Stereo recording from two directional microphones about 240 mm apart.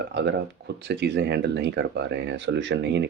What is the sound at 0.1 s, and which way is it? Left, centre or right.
Speech, right.